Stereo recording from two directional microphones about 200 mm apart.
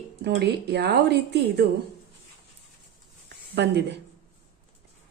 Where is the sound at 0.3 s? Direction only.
55° right (ahead or behind).